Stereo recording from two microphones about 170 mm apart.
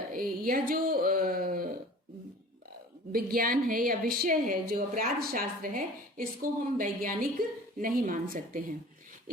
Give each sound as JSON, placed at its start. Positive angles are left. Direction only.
{"t": 0.1, "sound": "speech", "side_deg": -55}
{"t": 3.1, "sound": "a woman's voice", "side_deg": -60}